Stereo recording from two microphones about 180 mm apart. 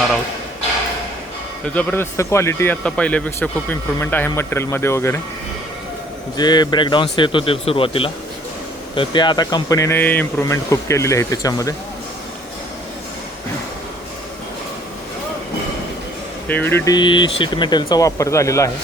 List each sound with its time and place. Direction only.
1.6 s speech: 10° left (ahead or behind)
6.3 s speech: 25° left (ahead or behind)
16.5 s speech: 10° left (ahead or behind)